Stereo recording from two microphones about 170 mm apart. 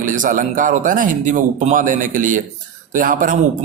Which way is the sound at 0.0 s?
50° right (ahead or behind).